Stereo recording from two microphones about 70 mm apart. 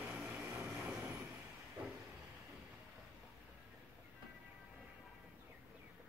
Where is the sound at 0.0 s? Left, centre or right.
Centre.